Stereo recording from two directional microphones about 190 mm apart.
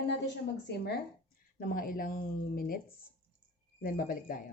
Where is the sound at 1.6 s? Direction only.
50° left (ahead or behind).